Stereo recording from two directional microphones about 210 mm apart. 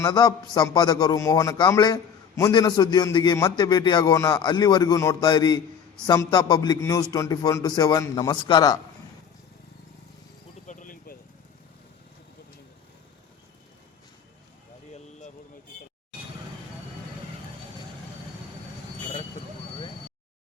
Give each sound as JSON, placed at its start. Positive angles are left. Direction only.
{"t": 0.0, "sound": "a man's voice", "side_deg": 20}
{"t": 10.7, "sound": "vehicle", "side_deg": 40}